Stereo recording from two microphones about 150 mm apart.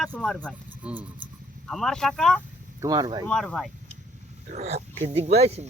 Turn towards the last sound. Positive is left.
turn(degrees=-45)  # may be behind; listen again after turning